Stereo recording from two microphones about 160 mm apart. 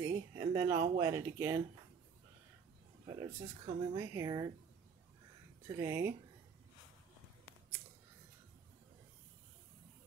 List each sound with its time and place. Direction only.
0.0 s a sound: 25° right (ahead or behind)
0.9 s speech: 20° right (ahead or behind)
3.1 s speech: 30° right (ahead or behind)
3.9 s speech: 20° right (ahead or behind)
5.7 s speech: 15° right (ahead or behind)